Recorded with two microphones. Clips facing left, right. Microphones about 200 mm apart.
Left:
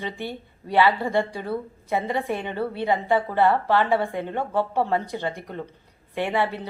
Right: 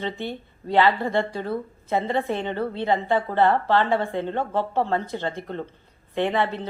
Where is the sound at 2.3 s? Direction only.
10° left (ahead or behind).